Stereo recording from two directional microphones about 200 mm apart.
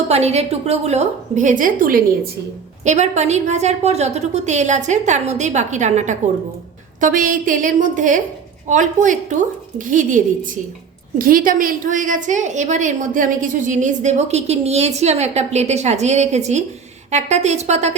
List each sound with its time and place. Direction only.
0.1 s a woman's voice: 30° right (ahead or behind)